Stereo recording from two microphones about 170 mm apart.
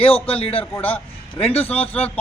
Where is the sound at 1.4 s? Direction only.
35° left (ahead or behind).